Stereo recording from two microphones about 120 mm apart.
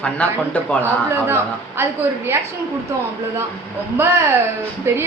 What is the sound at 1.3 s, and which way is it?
A woman's voice, 20° right (ahead or behind).